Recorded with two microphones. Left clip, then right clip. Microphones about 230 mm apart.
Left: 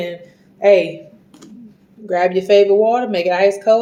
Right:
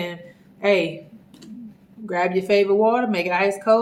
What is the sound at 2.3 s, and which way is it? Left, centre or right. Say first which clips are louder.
Speech: left 7 dB; right.